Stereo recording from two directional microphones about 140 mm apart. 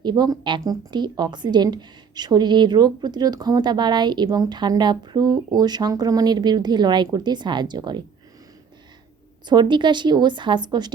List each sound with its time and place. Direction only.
0.0 s a woman's voice: 30° right (ahead or behind)
9.5 s a woman's voice: 35° right (ahead or behind)